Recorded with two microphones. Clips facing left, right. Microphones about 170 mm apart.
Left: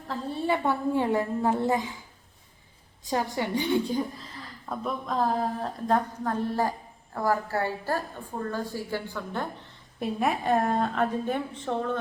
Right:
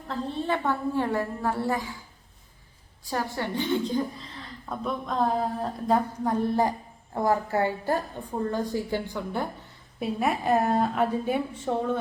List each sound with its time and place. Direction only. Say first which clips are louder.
0.1 s a woman's voice: even; 10° left (ahead or behind)
3.0 s a woman's voice: left 2 dB; 20° left (ahead or behind); by 6.0 s centre (ahead or behind)
6.2 s a woman's voice: right 3 dB; 15° right (ahead or behind)
10.0 s a woman's voice: even; centre (ahead or behind)